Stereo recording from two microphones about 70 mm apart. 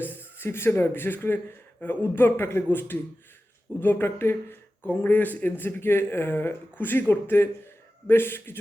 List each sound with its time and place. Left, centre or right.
0.0 s speech: left